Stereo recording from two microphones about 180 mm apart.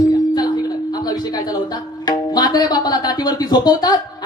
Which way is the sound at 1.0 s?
20° left (ahead or behind).